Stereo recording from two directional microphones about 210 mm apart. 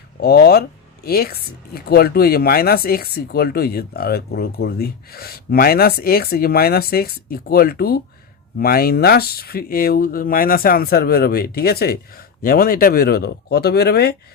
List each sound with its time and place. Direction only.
0.2 s speech: 50° left (ahead or behind)